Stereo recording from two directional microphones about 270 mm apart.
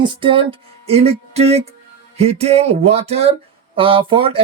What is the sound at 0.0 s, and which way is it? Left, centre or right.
Music, centre.